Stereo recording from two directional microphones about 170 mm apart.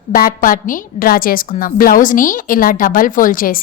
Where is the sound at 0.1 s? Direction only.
55° left (ahead or behind).